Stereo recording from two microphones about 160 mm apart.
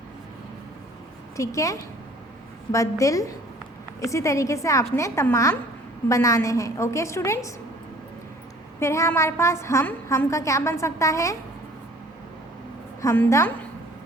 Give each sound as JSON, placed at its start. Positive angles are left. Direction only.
{"t": 1.4, "sound": "a woman's voice", "side_deg": 20}
{"t": 8.8, "sound": "a woman's voice", "side_deg": 15}
{"t": 13.0, "sound": "a woman's voice", "side_deg": 20}